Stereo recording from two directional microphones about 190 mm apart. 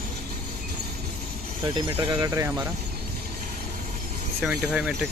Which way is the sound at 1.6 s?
25° right (ahead or behind).